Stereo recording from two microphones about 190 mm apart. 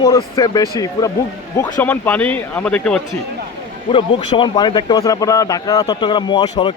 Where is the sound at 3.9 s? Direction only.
25° left (ahead or behind).